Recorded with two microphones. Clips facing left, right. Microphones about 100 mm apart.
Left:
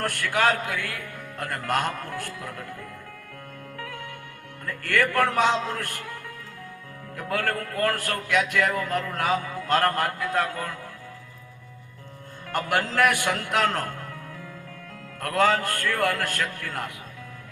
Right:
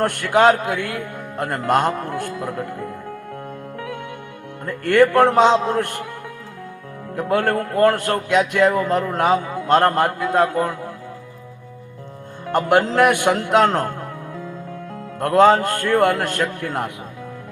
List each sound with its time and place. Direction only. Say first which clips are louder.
0.0 s a man's voice: right 9 dB; 20° right (ahead or behind)
3.8 s music: right 6 dB; 20° right (ahead or behind)
4.6 s a man's voice: right 10 dB; 25° right (ahead or behind)
7.2 s a man's voice: right 8 dB; 25° right (ahead or behind)
12.5 s a man's voice: right 9 dB; 20° right (ahead or behind)
15.2 s a man's voice: right 9 dB; 20° right (ahead or behind)